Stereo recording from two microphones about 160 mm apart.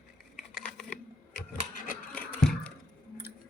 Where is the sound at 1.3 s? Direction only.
60° left (ahead or behind).